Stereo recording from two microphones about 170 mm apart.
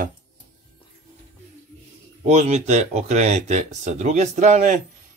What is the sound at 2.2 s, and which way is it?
Speech, 45° right (ahead or behind).